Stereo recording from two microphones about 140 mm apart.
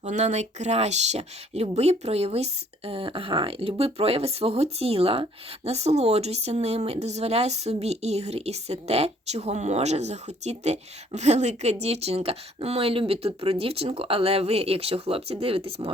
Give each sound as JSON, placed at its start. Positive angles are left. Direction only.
{"t": 0.0, "sound": "speech", "side_deg": -55}